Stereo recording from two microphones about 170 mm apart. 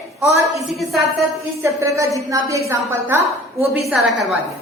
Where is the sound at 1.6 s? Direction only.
15° right (ahead or behind).